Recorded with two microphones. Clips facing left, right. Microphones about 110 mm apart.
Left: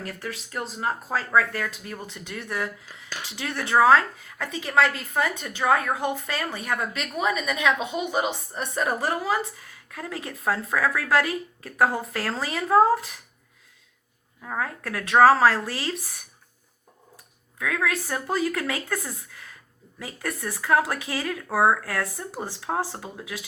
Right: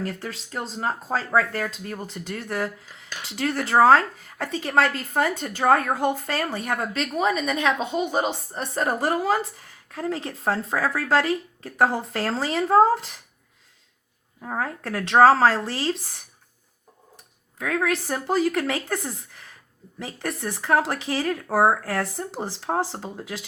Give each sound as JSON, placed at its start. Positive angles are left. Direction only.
{"t": 0.0, "sound": "a woman's voice", "side_deg": -30}
{"t": 14.4, "sound": "a woman's voice", "side_deg": -30}
{"t": 17.6, "sound": "a woman's voice", "side_deg": -25}